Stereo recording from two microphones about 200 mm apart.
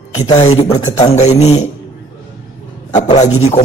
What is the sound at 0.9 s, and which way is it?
Speech, 35° left (ahead or behind).